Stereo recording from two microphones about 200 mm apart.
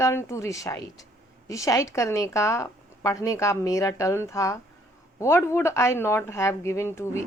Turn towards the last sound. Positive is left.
turn(degrees=15)  # may be behind; listen again after turning